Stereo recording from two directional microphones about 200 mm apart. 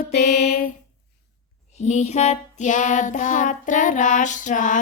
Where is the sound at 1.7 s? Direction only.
35° left (ahead or behind).